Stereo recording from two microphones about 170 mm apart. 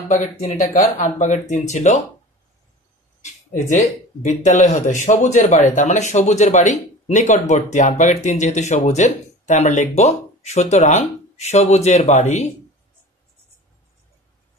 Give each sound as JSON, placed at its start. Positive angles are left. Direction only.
{"t": 0.1, "sound": "speech", "side_deg": 45}
{"t": 3.2, "sound": "speech", "side_deg": 45}